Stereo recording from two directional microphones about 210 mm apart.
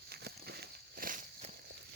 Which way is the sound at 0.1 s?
50° right (ahead or behind).